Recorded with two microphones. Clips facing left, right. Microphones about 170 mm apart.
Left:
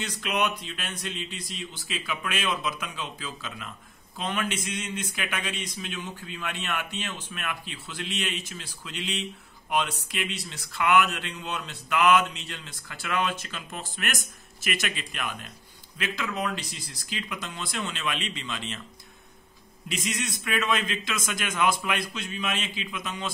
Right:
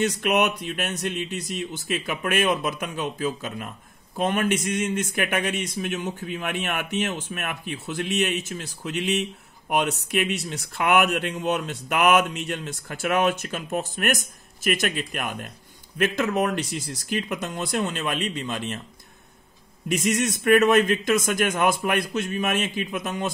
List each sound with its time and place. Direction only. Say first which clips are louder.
0.2 s a man's voice: right 6 dB; 55° right (ahead or behind)
19.9 s a man's voice: right 9 dB; 50° right (ahead or behind)